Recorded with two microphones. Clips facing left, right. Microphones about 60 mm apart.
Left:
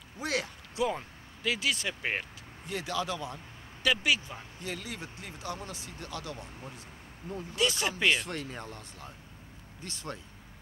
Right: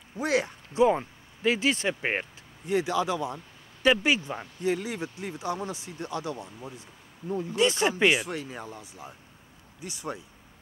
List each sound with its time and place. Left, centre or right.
0.2 s speech: right
2.7 s speech: centre
4.6 s speech: right
8.2 s speech: centre